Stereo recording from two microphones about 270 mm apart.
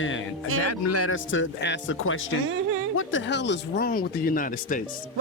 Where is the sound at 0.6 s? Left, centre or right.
Left.